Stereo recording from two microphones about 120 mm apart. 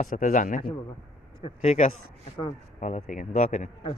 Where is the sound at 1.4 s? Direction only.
60° left (ahead or behind).